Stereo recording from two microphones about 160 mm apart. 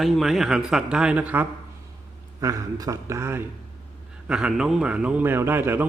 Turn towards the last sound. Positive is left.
turn(degrees=-15)  # may be behind; listen again after turning